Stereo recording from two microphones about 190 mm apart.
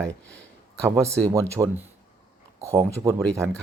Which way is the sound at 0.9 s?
15° right (ahead or behind).